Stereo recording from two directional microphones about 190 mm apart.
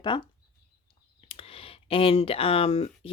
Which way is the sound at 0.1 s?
25° left (ahead or behind).